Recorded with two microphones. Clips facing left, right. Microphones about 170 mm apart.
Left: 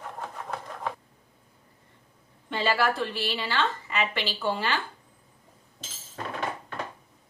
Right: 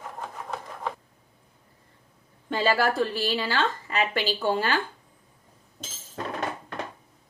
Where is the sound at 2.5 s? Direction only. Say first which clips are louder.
Right 2 dB; 40° right (ahead or behind).